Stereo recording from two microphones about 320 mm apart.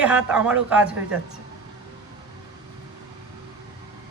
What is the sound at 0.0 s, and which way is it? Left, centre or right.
Speech, centre.